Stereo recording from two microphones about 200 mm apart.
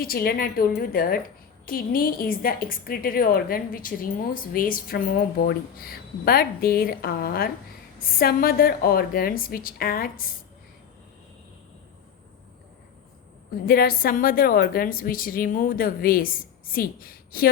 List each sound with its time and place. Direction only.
0.0 s a woman's voice: 50° left (ahead or behind)
13.7 s a woman's voice: 50° left (ahead or behind)